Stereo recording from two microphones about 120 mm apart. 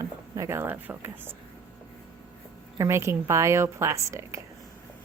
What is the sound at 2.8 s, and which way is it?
A woman's voice, 25° right (ahead or behind).